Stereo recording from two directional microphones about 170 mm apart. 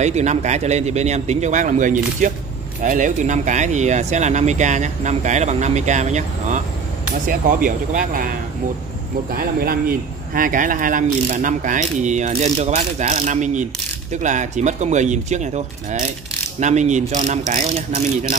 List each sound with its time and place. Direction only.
0.0 s speech: 40° right (ahead or behind)
9.3 s speech: 60° right (ahead or behind); by 18.0 s 45° right (ahead or behind)